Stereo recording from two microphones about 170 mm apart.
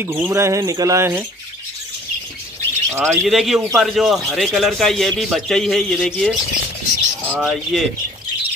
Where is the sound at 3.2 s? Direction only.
Centre (ahead or behind).